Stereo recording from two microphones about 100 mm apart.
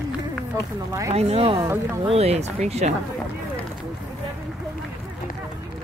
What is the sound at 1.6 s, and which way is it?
Speech, 25° right (ahead or behind).